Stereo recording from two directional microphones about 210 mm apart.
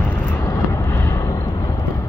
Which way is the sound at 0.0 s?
10° left (ahead or behind).